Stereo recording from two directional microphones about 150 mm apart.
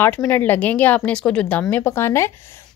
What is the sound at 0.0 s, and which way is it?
A woman's voice, 15° left (ahead or behind).